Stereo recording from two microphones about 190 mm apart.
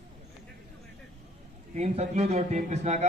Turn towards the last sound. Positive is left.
turn(degrees=-35)  # may be behind; listen again after turning